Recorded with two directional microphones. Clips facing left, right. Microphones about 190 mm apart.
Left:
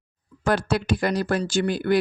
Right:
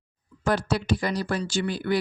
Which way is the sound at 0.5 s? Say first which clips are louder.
Left 2 dB; 55° left (ahead or behind).